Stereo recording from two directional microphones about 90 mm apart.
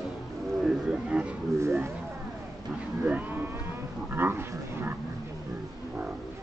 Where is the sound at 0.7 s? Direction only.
10° right (ahead or behind).